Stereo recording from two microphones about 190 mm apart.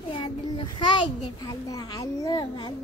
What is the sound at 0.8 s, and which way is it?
A child's voice, 25° left (ahead or behind).